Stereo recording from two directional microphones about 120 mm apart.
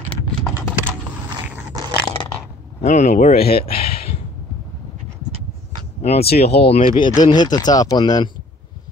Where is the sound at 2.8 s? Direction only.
75° left (ahead or behind).